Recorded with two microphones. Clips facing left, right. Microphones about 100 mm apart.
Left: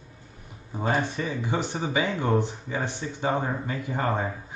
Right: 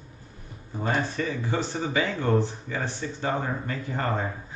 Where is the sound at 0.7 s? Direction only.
15° left (ahead or behind).